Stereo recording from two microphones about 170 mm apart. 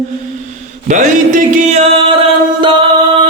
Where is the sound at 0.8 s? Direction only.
50° right (ahead or behind).